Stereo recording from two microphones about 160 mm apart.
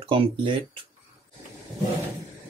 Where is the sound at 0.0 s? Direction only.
35° right (ahead or behind).